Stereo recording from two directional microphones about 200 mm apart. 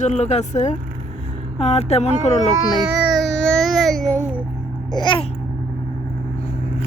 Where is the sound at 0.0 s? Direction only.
35° left (ahead or behind).